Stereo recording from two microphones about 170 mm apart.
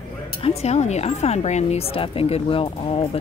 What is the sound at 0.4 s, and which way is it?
Speech, 40° left (ahead or behind).